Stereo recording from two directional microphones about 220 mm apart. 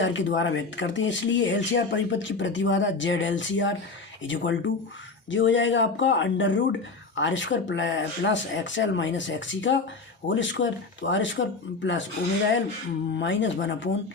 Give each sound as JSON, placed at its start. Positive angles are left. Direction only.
{"t": 0.0, "sound": "speech", "side_deg": 55}
{"t": 13.1, "sound": "speech", "side_deg": 55}